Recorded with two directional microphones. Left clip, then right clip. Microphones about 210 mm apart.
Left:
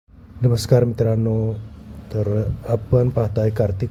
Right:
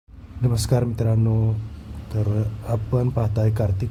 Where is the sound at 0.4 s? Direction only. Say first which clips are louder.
Left 7 dB; 15° left (ahead or behind).